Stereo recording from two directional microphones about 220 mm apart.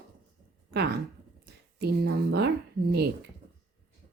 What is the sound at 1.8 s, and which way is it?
Speech, 50° right (ahead or behind).